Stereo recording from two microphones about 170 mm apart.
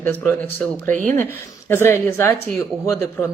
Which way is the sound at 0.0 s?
10° left (ahead or behind).